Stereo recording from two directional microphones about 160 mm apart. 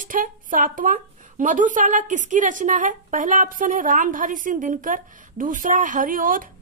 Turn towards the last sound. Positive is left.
turn(degrees=-60)  # may be behind; listen again after turning